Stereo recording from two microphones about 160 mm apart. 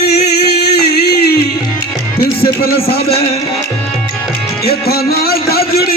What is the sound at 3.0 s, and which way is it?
Music, 40° left (ahead or behind).